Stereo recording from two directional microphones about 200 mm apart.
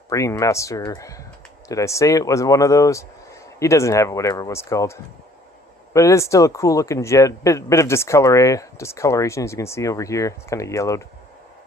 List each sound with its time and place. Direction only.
0.1 s speech: 15° left (ahead or behind)